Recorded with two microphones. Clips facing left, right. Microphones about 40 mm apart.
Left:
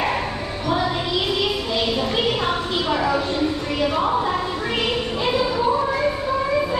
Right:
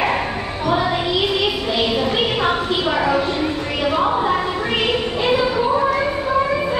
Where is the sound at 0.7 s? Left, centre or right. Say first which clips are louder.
Right 3 dB; centre.